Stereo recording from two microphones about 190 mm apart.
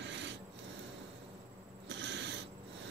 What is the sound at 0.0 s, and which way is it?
Filing, 70° right (ahead or behind).